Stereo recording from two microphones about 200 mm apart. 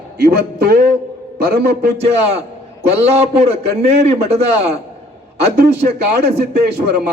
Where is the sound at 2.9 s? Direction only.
30° right (ahead or behind).